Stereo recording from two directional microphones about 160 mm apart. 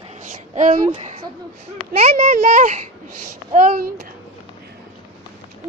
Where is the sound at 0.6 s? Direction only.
50° right (ahead or behind).